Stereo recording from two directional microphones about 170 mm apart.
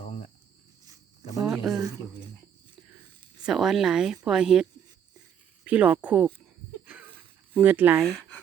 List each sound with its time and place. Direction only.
1.5 s speech: centre (ahead or behind)
3.4 s speech: centre (ahead or behind)
5.6 s speech: 10° right (ahead or behind)
6.8 s a sound: 10° right (ahead or behind)
8.0 s speech: 5° left (ahead or behind)